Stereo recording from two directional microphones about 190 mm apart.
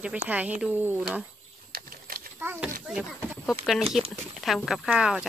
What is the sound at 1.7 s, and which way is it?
Typewriter, 50° right (ahead or behind).